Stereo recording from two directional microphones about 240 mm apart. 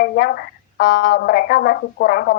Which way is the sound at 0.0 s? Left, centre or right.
Left.